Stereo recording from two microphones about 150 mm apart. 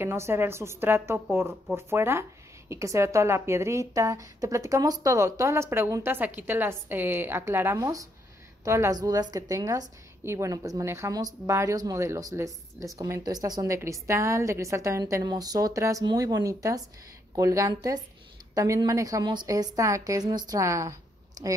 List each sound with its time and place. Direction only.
0.0 s a woman's voice: 15° right (ahead or behind)